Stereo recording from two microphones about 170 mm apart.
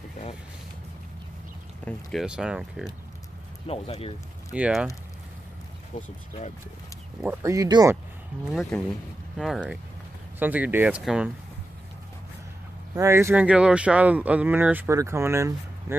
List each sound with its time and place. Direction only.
1.9 s speech: centre (ahead or behind)
3.6 s speech: 35° left (ahead or behind)
4.5 s speech: 5° right (ahead or behind)
5.9 s speech: 45° left (ahead or behind)
7.2 s speech: 15° right (ahead or behind)
8.7 s speech: 5° left (ahead or behind)
12.9 s speech: 15° right (ahead or behind)